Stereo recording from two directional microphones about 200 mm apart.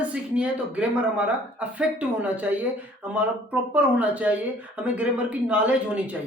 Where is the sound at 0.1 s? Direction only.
5° right (ahead or behind).